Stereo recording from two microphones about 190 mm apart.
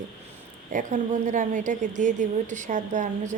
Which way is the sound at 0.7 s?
40° right (ahead or behind).